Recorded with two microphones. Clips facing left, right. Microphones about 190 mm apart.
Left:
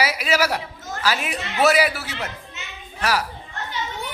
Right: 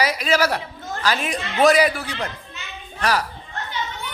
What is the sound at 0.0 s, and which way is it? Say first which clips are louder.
A man's voice: right 2 dB; 10° left (ahead or behind).